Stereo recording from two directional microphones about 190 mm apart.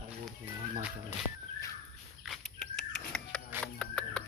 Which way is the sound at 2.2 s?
Centre (ahead or behind).